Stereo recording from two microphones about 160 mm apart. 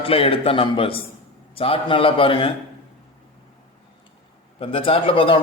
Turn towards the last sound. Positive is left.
turn(degrees=35)  # may be behind; listen again after turning